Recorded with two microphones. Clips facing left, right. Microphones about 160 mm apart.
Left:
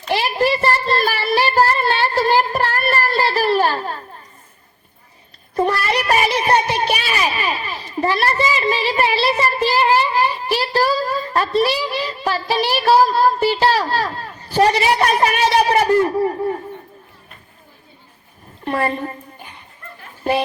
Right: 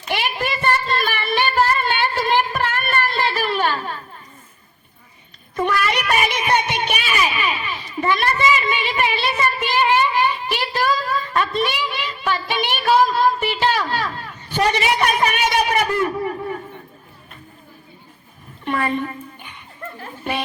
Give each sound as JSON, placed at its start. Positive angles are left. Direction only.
{"t": 0.1, "sound": "child singing", "side_deg": 35}
{"t": 5.5, "sound": "music", "side_deg": 35}
{"t": 18.6, "sound": "a sound", "side_deg": 35}